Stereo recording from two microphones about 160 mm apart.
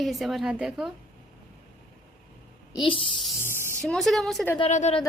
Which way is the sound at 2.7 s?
35° left (ahead or behind).